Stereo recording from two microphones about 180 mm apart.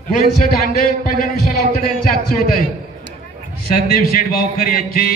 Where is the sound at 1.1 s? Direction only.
50° left (ahead or behind).